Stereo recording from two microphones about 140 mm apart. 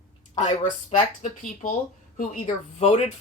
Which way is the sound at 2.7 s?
50° left (ahead or behind).